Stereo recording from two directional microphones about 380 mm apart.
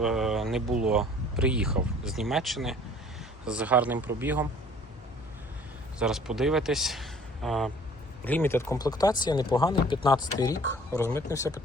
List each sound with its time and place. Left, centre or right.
0.0 s speech: centre
6.0 s a man's voice: centre